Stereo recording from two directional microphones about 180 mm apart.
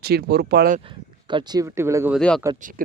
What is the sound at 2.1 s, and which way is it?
Speech, 5° left (ahead or behind).